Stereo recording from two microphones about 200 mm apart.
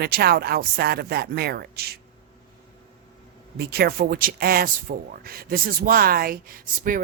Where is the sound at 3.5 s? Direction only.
55° right (ahead or behind).